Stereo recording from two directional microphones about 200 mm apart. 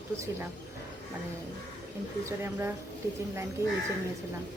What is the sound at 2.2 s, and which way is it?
Speech, 10° right (ahead or behind).